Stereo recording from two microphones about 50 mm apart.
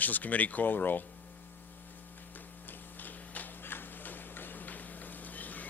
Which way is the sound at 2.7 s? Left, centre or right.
Left.